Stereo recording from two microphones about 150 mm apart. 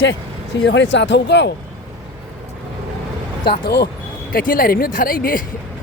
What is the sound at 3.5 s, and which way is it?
Speech, 90° left.